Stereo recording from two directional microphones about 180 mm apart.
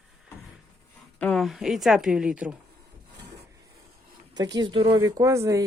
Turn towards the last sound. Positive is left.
turn(degrees=-15)  # may be behind; listen again after turning